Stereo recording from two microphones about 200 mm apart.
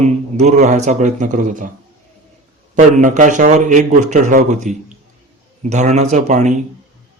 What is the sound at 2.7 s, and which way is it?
A man's voice, 40° right (ahead or behind).